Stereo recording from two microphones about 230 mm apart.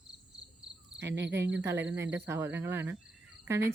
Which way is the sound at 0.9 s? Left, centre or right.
Right.